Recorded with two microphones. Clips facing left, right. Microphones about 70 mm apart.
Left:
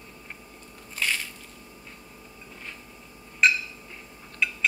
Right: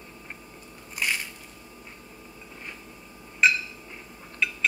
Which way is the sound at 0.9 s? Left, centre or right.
Centre.